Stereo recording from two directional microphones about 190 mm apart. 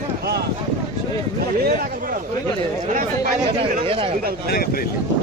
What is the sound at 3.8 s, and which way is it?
Speech, 30° right (ahead or behind).